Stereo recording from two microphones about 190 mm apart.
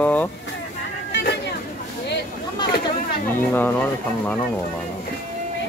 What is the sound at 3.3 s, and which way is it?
Speech, 10° left (ahead or behind).